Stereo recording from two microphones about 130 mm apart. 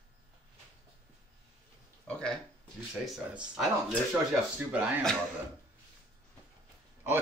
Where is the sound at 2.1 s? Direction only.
5° left (ahead or behind).